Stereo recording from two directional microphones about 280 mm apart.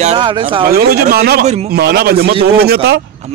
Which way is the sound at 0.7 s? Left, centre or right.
Right.